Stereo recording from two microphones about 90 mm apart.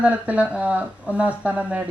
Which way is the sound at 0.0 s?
15° right (ahead or behind).